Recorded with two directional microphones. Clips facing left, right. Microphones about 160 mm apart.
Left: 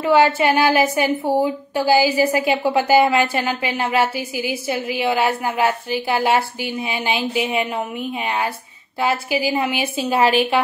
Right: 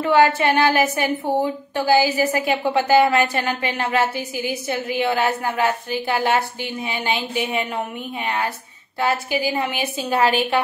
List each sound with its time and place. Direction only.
0.0 s a woman's voice: 10° left (ahead or behind)
9.0 s a woman's voice: 10° left (ahead or behind)